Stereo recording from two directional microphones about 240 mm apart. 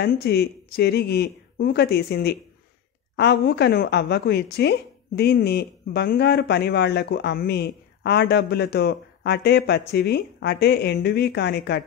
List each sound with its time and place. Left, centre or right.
0.0 s a woman's voice: left